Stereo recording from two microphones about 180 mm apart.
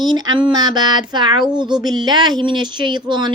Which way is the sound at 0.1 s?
20° right (ahead or behind).